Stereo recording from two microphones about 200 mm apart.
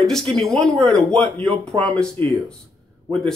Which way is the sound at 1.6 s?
5° left (ahead or behind).